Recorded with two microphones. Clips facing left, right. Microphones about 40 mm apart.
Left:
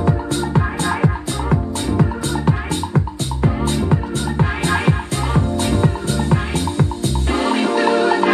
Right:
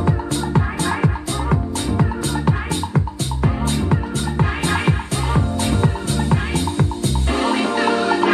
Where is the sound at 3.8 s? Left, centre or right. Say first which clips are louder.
Left 2 dB; centre.